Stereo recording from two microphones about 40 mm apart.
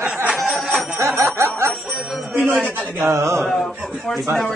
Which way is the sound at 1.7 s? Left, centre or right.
Centre.